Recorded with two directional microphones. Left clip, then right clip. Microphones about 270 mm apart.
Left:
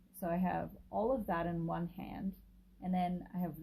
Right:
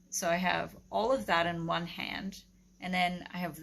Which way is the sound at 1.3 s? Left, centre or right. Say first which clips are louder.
Right 8 dB; centre.